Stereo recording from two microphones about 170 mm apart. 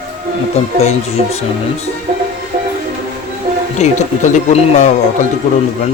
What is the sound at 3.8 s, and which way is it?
Speech, 45° left (ahead or behind).